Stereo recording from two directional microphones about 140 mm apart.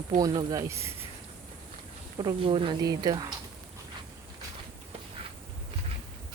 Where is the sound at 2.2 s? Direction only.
35° right (ahead or behind).